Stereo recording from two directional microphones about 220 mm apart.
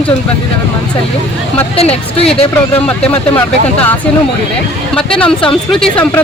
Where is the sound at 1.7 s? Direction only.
25° left (ahead or behind).